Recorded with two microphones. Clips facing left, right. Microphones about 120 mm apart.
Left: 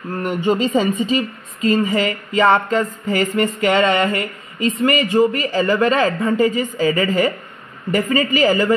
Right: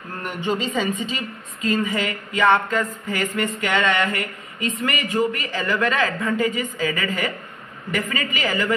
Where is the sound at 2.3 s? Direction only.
40° left (ahead or behind).